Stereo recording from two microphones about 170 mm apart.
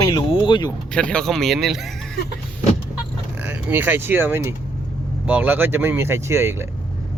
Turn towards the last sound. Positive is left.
turn(degrees=-15)  # may be behind; listen again after turning